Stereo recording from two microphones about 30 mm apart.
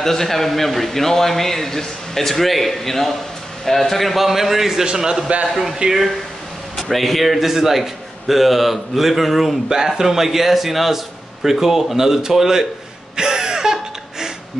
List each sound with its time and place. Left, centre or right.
0.0 s a man's voice: centre
5.3 s a man's voice: right
5.8 s speech: right
6.8 s a man's voice: centre
9.7 s a man's voice: centre
13.1 s a sound: right